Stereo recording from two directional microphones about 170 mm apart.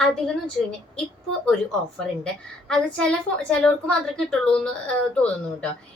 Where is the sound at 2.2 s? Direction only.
5° left (ahead or behind).